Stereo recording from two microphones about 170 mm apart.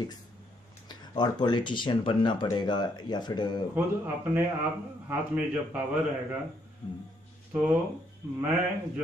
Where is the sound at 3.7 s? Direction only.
10° right (ahead or behind).